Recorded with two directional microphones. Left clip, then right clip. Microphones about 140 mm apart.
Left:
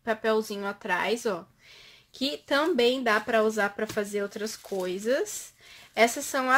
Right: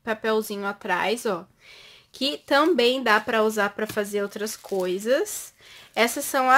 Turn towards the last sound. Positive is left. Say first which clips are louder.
# right 2 dB
turn(degrees=-35)  # may be behind; listen again after turning